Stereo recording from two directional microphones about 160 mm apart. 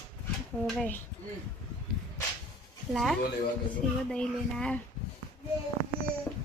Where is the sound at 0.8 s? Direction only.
10° left (ahead or behind).